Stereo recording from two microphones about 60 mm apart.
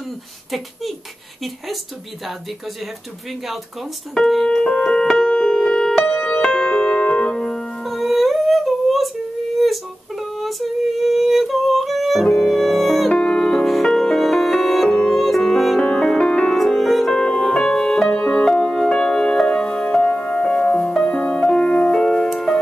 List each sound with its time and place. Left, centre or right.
4.1 s piano: centre
6.0 s music: left
6.4 s music: centre
7.8 s music: centre
9.6 s a sound: centre
11.0 s music: centre
13.1 s music: centre
13.7 s music: centre
16.5 s music: centre